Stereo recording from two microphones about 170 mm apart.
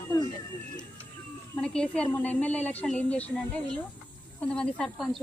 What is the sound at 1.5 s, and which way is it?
A woman's voice, 5° left (ahead or behind).